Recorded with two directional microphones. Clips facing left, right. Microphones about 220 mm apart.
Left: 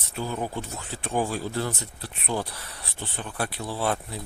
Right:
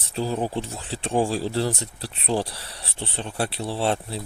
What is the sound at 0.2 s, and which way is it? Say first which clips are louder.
Speech: right 5 dB; 30° right (ahead or behind).